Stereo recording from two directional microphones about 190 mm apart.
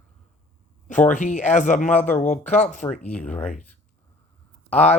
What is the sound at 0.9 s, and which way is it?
Speech, 40° left (ahead or behind).